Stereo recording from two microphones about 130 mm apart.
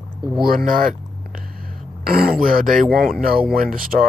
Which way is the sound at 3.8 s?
90° right.